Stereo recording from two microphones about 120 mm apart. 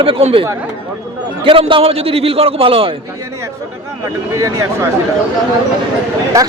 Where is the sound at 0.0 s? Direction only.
55° right (ahead or behind).